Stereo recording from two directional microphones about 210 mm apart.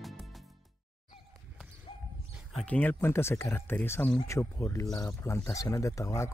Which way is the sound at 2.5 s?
5° left (ahead or behind).